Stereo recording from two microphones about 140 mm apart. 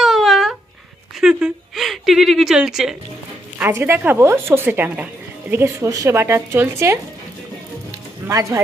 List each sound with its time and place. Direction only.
0.0 s a sound: centre (ahead or behind)
3.6 s a woman's voice: 15° right (ahead or behind)
8.3 s speech: 25° right (ahead or behind)